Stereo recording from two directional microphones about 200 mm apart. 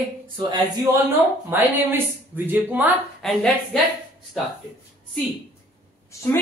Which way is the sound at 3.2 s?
Centre (ahead or behind).